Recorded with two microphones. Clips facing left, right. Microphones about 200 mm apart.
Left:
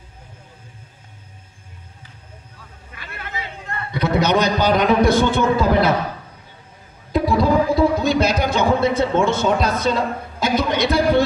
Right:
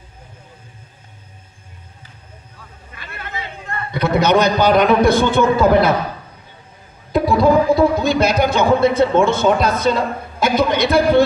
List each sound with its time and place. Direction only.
3.3 s a man's voice: 55° right (ahead or behind)
7.1 s a sound: 50° right (ahead or behind)
10.4 s a man's voice: 55° right (ahead or behind)